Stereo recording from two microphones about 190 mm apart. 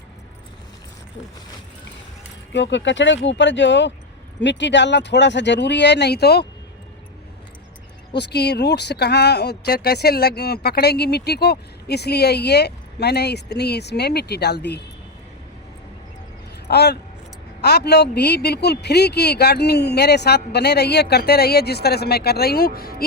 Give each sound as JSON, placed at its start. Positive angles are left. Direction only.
{"t": 2.5, "sound": "speech", "side_deg": 70}
{"t": 8.1, "sound": "speech", "side_deg": 60}
{"t": 16.6, "sound": "speech", "side_deg": 60}